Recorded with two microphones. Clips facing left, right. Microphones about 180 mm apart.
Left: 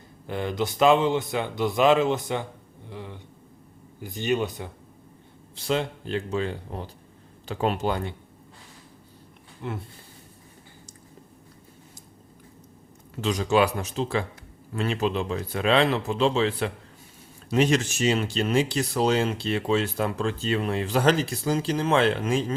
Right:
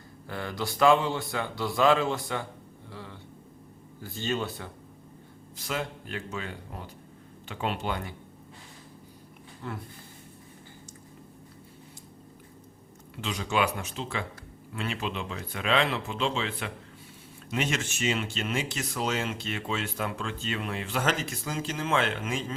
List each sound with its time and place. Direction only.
0.3 s speech: 20° left (ahead or behind)
5.5 s speech: 30° left (ahead or behind)
9.6 s speech: 20° left (ahead or behind)
13.2 s speech: 40° left (ahead or behind)